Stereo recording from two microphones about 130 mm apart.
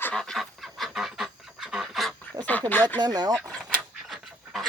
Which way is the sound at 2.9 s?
35° right (ahead or behind).